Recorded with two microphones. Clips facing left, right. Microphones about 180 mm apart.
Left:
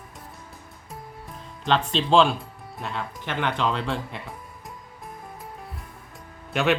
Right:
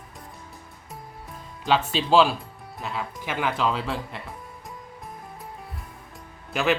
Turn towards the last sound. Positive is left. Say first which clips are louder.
# left 1 dB
turn(degrees=0)  # may be behind; listen again after turning